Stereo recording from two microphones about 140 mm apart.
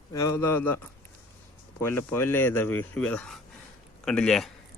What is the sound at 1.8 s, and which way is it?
Speech, 15° left (ahead or behind).